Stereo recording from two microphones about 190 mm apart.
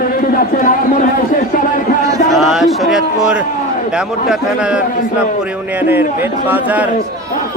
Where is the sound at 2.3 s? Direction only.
Centre (ahead or behind).